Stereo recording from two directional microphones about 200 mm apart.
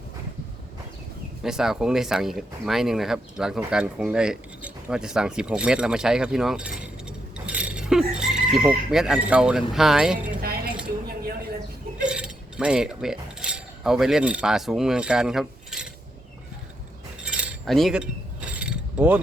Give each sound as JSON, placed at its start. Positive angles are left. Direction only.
{"t": 1.4, "sound": "speech", "side_deg": 0}
{"t": 7.3, "sound": "chicken", "side_deg": -5}
{"t": 10.4, "sound": "a sound", "side_deg": -50}
{"t": 12.0, "sound": "cutlery", "side_deg": -5}
{"t": 17.2, "sound": "mechanisms", "side_deg": -5}